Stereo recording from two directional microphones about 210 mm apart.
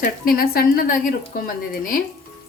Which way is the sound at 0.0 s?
45° left (ahead or behind).